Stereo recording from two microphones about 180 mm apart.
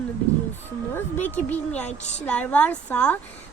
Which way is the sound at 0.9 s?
10° left (ahead or behind).